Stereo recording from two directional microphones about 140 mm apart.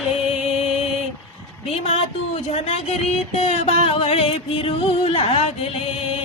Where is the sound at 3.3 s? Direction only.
55° left (ahead or behind).